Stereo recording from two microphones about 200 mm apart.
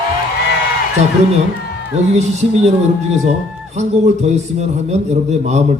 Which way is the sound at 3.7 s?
35° right (ahead or behind).